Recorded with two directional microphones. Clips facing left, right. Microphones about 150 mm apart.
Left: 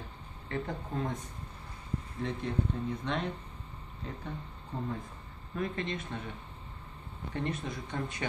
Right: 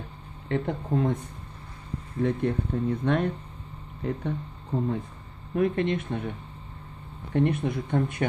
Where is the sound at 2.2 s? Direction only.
55° right (ahead or behind).